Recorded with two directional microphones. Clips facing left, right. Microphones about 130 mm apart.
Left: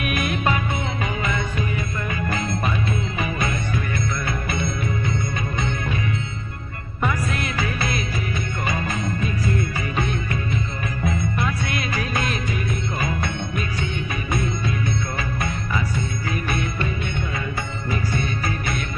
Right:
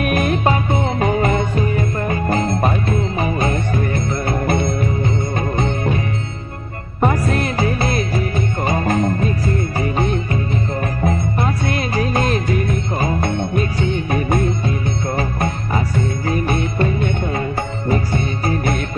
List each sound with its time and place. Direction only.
0.0 s music: 35° right (ahead or behind)